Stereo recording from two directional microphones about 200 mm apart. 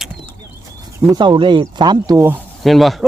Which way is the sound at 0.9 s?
10° right (ahead or behind).